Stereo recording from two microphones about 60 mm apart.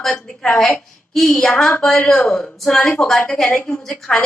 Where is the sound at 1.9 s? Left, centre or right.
Centre.